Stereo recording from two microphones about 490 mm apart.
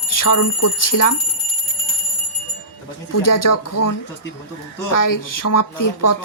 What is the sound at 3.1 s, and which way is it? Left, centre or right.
Speech, left.